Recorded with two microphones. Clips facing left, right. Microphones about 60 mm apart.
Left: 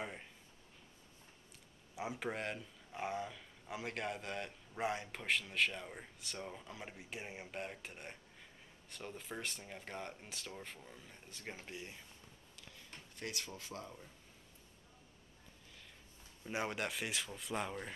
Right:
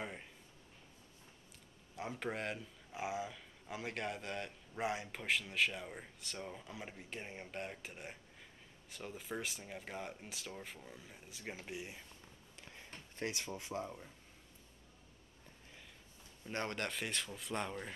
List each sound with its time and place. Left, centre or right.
0.0 s speech: centre
2.0 s speech: centre
13.1 s speech: right
16.4 s speech: centre